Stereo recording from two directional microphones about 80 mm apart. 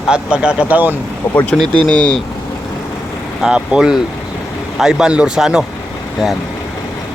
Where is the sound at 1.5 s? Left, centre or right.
Centre.